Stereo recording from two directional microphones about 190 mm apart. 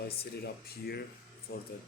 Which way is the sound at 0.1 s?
55° left (ahead or behind).